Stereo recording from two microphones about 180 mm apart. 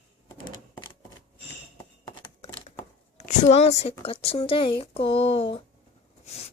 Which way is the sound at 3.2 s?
40° left (ahead or behind).